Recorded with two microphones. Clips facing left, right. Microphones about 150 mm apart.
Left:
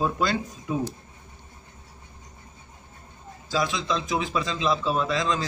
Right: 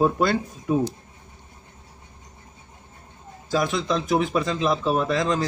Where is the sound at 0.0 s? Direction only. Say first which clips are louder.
Right 5 dB; 55° right (ahead or behind).